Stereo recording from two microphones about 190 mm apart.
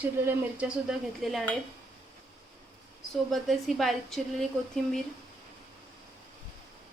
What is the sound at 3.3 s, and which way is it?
Speech, centre (ahead or behind).